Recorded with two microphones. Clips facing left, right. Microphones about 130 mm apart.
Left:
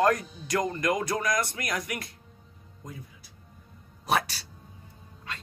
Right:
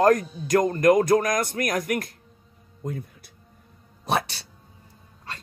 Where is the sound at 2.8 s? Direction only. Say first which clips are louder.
Right 11 dB; 60° right (ahead or behind).